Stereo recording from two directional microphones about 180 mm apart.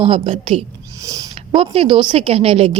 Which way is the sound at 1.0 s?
20° right (ahead or behind).